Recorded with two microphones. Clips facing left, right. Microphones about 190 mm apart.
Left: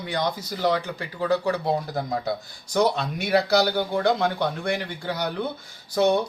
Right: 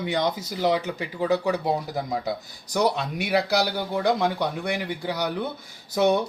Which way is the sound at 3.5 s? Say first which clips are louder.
Left 3 dB; 10° right (ahead or behind).